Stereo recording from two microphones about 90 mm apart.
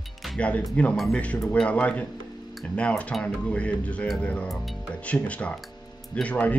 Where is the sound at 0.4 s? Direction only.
15° left (ahead or behind).